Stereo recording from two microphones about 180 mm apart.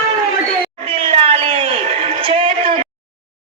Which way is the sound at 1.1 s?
30° right (ahead or behind).